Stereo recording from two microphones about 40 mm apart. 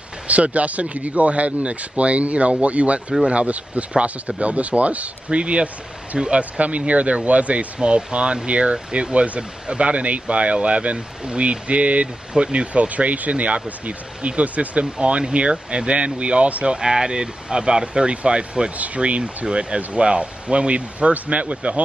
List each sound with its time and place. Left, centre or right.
0.3 s speech: right
6.8 s speech: right
9.4 s speech: centre
9.8 s speech: right
16.7 s speech: centre; by 21.8 s right